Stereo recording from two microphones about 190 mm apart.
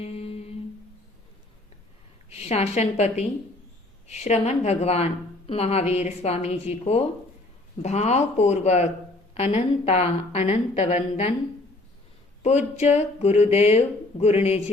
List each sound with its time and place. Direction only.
0.0 s humming: 30° left (ahead or behind)
2.3 s a woman's voice: 35° left (ahead or behind)
12.4 s a woman's voice: 35° left (ahead or behind)